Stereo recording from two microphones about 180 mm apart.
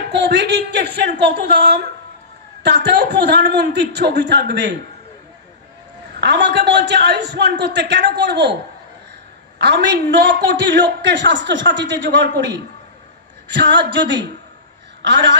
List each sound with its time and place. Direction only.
0.1 s a man's voice: 75° right (ahead or behind)
6.2 s a man's voice: 70° right (ahead or behind)
9.6 s a man's voice: 70° right (ahead or behind)